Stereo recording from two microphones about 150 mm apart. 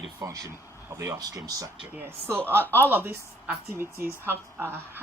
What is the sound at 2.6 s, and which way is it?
Speech, 15° left (ahead or behind).